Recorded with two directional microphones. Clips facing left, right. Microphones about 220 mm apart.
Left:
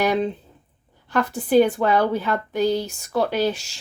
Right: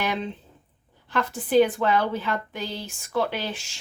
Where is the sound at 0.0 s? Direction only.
40° left (ahead or behind).